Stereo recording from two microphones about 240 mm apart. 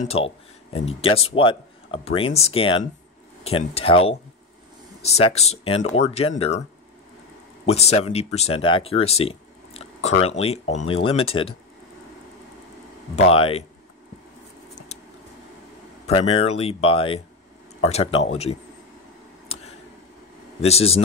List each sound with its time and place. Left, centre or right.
0.0 s speech: left
7.6 s speech: left
13.1 s speech: left
16.1 s speech: left
20.6 s speech: left